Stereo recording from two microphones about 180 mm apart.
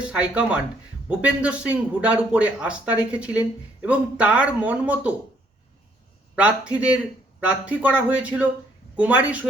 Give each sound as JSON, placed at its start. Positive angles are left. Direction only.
{"t": 0.0, "sound": "a man's voice", "side_deg": -5}
{"t": 6.3, "sound": "a man's voice", "side_deg": -5}